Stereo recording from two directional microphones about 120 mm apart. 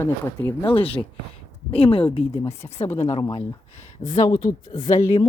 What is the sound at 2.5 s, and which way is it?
Speech, 65° left (ahead or behind).